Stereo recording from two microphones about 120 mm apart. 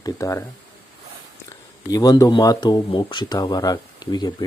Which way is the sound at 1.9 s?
30° left (ahead or behind).